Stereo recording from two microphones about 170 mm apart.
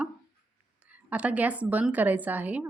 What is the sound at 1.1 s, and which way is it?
Speech, 10° right (ahead or behind).